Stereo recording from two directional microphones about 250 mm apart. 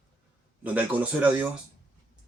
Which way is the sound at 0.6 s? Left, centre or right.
Centre.